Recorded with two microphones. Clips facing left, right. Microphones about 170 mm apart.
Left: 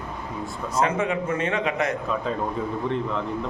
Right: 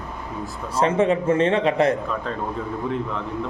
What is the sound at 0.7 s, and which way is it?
A man's voice, 30° right (ahead or behind).